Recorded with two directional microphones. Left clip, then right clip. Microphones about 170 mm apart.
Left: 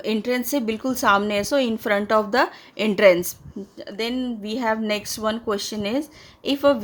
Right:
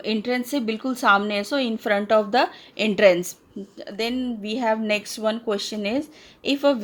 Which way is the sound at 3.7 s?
35° left (ahead or behind).